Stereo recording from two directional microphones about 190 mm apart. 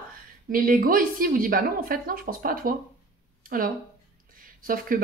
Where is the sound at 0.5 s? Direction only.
50° right (ahead or behind).